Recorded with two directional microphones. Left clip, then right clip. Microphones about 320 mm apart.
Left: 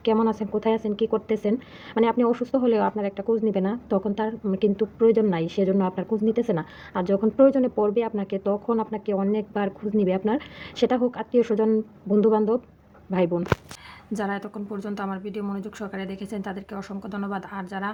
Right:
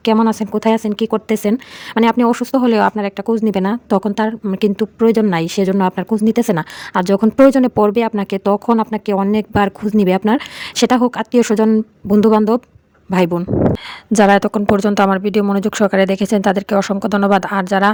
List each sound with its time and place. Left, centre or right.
0.0 s a woman's voice: right